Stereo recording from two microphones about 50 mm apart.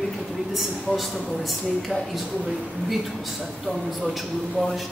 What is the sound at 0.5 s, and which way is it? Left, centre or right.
Speech, centre.